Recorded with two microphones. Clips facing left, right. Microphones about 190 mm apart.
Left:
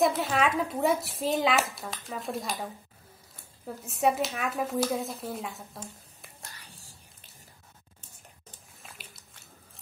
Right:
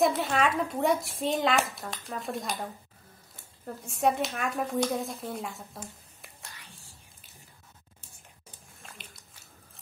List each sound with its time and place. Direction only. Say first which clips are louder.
0.0 s speech: even; centre (ahead or behind)
6.5 s whispering: even; 40° left (ahead or behind)
8.8 s a sound: right 1 dB; centre (ahead or behind)